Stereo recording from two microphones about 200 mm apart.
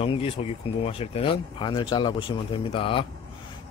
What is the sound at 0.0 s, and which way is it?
Speech, 25° left (ahead or behind).